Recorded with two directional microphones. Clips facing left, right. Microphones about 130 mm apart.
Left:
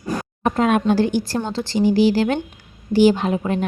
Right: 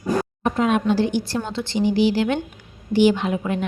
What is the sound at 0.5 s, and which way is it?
A woman's voice, 55° left (ahead or behind).